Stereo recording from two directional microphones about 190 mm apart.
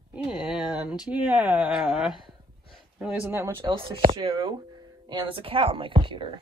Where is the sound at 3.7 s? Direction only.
30° right (ahead or behind).